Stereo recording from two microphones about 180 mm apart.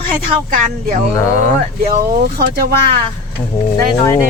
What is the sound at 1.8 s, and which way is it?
Speech, 45° right (ahead or behind).